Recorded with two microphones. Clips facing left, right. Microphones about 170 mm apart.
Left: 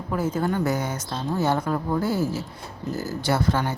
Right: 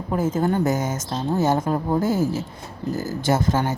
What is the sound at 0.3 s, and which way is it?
Speech, 30° right (ahead or behind).